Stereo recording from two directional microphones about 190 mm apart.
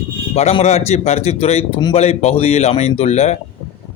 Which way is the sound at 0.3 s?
35° left (ahead or behind).